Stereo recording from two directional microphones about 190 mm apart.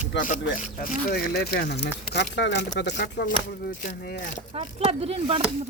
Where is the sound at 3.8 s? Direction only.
50° left (ahead or behind).